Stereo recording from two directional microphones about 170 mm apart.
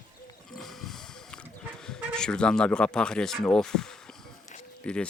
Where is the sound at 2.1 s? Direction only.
5° left (ahead or behind).